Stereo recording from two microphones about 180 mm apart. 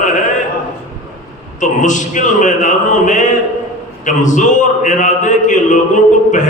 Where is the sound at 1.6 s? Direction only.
45° left (ahead or behind).